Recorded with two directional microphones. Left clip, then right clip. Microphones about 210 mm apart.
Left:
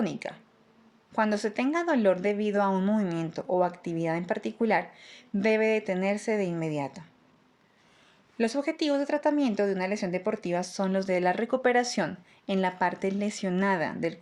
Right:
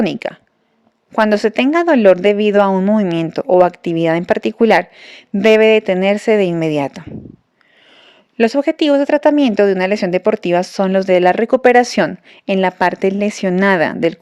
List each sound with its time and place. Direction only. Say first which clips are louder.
0.0 s speech: right 14 dB; 40° right (ahead or behind)
8.4 s speech: right 14 dB; 40° right (ahead or behind)